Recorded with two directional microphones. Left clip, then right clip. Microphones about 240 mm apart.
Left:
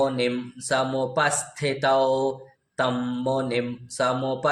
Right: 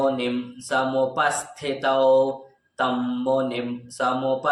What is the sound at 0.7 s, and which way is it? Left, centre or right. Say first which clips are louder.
Mantra: right 2 dB; left.